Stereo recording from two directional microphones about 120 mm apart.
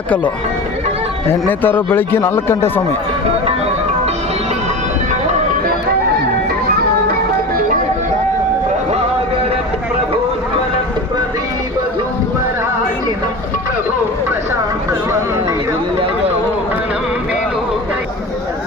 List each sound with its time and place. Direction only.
1.3 s speech: 15° left (ahead or behind)